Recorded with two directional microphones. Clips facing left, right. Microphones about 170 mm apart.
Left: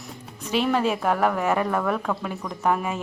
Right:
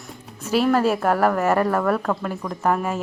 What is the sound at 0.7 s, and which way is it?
A woman's voice, 5° right (ahead or behind).